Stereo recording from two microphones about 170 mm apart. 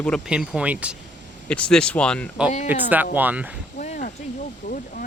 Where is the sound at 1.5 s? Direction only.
5° left (ahead or behind).